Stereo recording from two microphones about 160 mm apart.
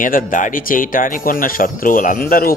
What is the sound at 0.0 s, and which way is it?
Speech, 60° left (ahead or behind).